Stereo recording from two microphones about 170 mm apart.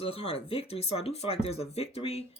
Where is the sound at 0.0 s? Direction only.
35° left (ahead or behind).